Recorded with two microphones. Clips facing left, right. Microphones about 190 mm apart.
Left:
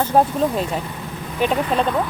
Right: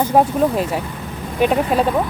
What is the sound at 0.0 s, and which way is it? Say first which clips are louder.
Speech: right 2 dB; 10° right (ahead or behind).